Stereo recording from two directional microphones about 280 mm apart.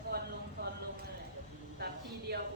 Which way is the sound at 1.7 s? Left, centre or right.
Right.